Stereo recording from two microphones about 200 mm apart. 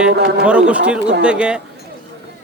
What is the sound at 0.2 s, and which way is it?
Speech, 50° right (ahead or behind).